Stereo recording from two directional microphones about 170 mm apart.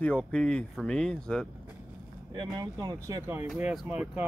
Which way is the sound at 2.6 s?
25° right (ahead or behind).